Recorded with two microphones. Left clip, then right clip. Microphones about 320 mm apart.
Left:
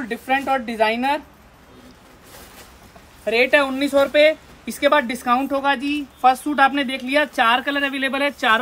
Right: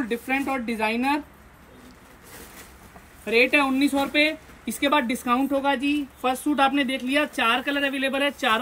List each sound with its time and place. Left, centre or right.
0.7 s a woman's voice: centre
3.3 s speech: centre